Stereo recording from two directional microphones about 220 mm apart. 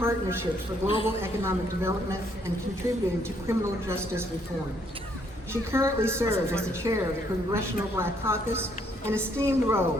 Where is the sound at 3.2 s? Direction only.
10° right (ahead or behind).